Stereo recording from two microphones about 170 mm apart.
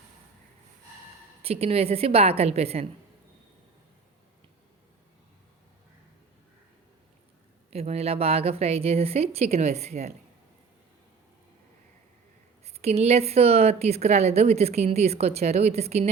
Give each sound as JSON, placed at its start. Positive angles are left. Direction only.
{"t": 1.4, "sound": "a woman's voice", "side_deg": -35}
{"t": 7.7, "sound": "a woman's voice", "side_deg": -40}
{"t": 12.6, "sound": "a woman's voice", "side_deg": -40}